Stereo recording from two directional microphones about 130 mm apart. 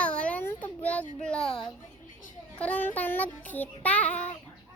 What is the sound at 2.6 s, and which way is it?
Child singing, 10° left (ahead or behind).